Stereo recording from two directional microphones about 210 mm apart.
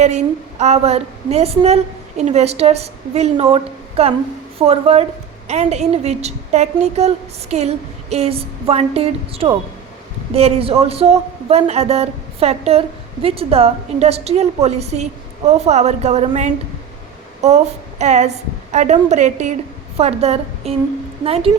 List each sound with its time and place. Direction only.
0.6 s a woman's voice: 30° right (ahead or behind)
18.0 s a woman's voice: 35° right (ahead or behind)